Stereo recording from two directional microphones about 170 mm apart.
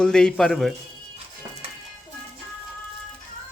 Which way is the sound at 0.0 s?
5° left (ahead or behind).